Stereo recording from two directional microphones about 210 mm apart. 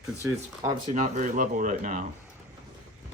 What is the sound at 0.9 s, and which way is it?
Speech, 35° right (ahead or behind).